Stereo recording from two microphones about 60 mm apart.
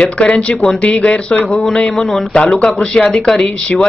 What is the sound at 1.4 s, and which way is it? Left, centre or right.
Speech, centre.